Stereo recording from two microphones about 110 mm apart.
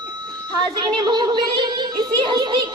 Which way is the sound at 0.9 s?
40° right (ahead or behind).